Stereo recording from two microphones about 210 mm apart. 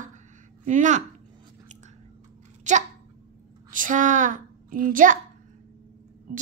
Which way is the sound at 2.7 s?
35° right (ahead or behind).